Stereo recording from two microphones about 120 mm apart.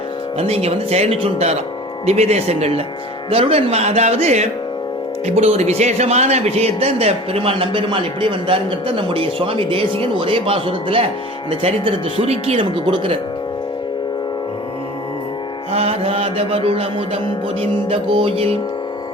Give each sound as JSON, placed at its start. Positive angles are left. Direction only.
{"t": 0.3, "sound": "speech", "side_deg": -60}
{"t": 12.2, "sound": "speech", "side_deg": -60}
{"t": 15.7, "sound": "speech", "side_deg": -60}